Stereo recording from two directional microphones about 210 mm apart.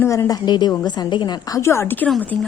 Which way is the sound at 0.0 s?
15° left (ahead or behind).